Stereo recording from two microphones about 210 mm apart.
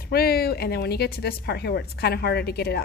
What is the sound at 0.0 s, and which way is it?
Speech, 45° left (ahead or behind).